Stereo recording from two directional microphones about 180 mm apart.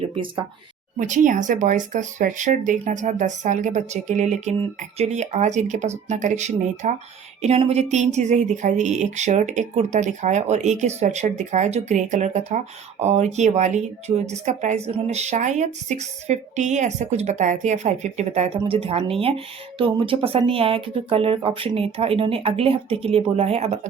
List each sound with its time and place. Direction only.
0.9 s speech: 45° right (ahead or behind)